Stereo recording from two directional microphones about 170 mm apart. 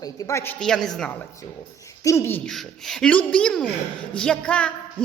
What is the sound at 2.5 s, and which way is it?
A man's voice, centre (ahead or behind).